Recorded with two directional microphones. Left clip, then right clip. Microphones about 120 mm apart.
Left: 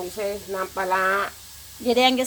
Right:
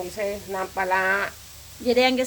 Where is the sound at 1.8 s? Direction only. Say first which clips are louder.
Left 1 dB; 20° left (ahead or behind).